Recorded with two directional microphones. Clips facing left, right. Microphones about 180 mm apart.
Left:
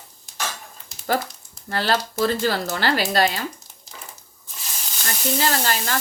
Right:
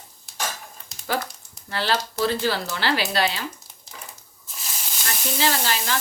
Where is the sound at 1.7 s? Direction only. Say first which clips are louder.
Left 2 dB; 45° left (ahead or behind).